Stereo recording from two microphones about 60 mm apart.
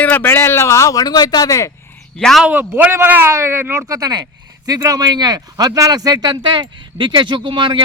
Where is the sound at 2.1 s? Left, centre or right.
Centre.